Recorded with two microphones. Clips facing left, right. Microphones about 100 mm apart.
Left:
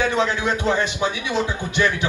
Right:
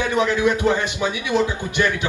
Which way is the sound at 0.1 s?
20° left (ahead or behind).